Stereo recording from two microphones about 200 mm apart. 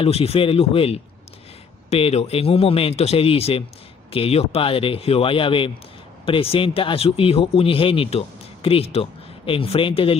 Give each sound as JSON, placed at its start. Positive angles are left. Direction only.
{"t": 0.0, "sound": "speech", "side_deg": 30}